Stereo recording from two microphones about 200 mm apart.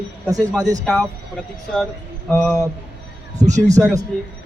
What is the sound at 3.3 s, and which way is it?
Speech, 35° right (ahead or behind).